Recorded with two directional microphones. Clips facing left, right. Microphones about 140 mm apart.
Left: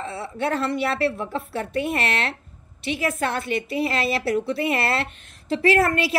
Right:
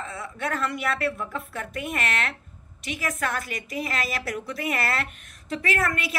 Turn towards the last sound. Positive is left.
turn(degrees=30)  # may be behind; listen again after turning